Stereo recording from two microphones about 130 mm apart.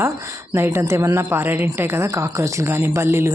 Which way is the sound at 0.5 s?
20° right (ahead or behind).